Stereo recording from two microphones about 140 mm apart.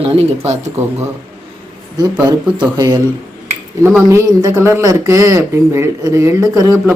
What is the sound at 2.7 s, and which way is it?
Speech, 25° right (ahead or behind).